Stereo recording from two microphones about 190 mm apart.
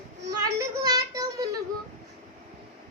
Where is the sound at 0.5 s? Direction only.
20° right (ahead or behind).